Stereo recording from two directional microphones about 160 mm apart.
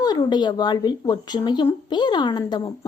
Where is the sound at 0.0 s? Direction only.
25° left (ahead or behind).